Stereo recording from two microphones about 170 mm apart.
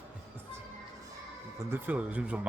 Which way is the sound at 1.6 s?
10° right (ahead or behind).